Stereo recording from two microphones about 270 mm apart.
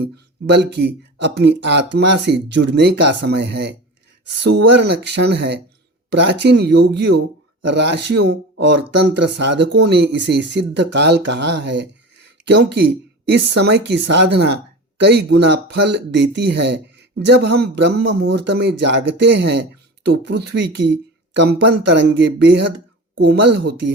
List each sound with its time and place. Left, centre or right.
0.5 s a woman's voice: right